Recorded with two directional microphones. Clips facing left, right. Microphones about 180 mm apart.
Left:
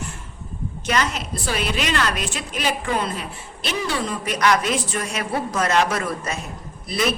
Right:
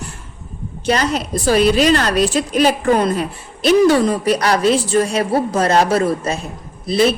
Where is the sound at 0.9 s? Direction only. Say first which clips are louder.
Right 6 dB; 35° right (ahead or behind).